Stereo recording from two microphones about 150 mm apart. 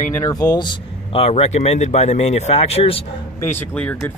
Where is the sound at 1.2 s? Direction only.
45° left (ahead or behind).